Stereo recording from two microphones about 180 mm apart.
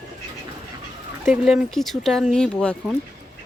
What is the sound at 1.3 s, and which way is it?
Speech, 5° right (ahead or behind).